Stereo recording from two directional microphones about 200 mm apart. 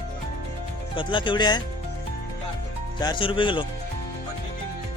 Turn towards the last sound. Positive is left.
turn(degrees=25)  # may be behind; listen again after turning